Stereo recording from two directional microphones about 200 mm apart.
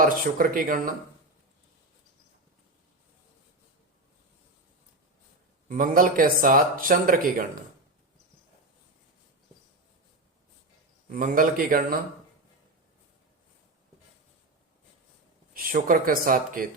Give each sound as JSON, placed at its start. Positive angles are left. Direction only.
{"t": 0.0, "sound": "speech", "side_deg": -45}
{"t": 5.6, "sound": "speech", "side_deg": -45}
{"t": 11.1, "sound": "speech", "side_deg": -40}
{"t": 15.5, "sound": "speech", "side_deg": -45}